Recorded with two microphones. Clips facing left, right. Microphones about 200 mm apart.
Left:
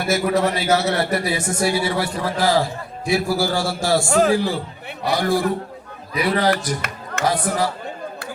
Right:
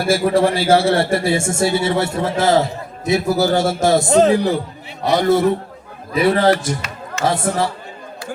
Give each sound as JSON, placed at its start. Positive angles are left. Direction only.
{"t": 0.0, "sound": "a man's voice", "side_deg": -30}